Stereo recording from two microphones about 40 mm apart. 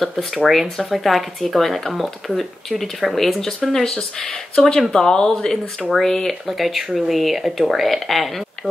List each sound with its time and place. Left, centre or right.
0.0 s speech: centre
3.3 s speech: centre
4.2 s speech: left
6.4 s speech: centre